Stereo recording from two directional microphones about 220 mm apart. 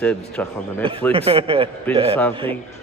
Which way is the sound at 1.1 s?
25° right (ahead or behind).